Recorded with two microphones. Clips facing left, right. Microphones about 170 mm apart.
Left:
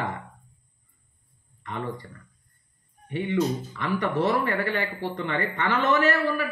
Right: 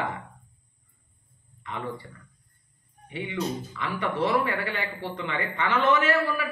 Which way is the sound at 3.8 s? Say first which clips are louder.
Left 3 dB; 45° left (ahead or behind).